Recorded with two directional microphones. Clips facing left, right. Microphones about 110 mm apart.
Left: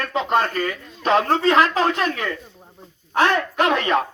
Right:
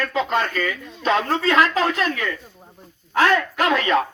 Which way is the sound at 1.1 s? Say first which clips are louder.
Left 2 dB; 35° left (ahead or behind).